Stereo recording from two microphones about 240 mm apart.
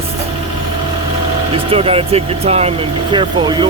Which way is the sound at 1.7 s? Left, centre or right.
Right.